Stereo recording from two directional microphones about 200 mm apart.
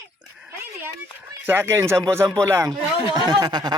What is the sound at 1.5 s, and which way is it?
Speech, 10° right (ahead or behind).